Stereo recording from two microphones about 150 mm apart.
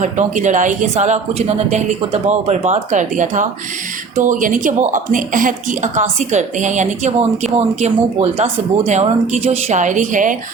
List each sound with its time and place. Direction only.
0.0 s speech: 55° right (ahead or behind)